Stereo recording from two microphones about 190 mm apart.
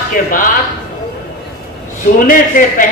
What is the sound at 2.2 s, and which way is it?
Speech, 45° left (ahead or behind).